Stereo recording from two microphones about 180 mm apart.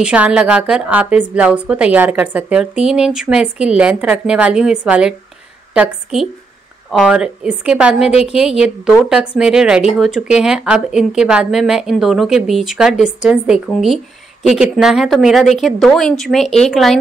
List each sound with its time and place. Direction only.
0.0 s a woman's voice: 5° right (ahead or behind)
8.1 s a woman's voice: 35° left (ahead or behind)
8.4 s speech: 5° right (ahead or behind)